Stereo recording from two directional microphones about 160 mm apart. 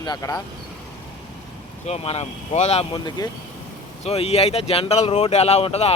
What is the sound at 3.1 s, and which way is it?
Speech, 25° left (ahead or behind).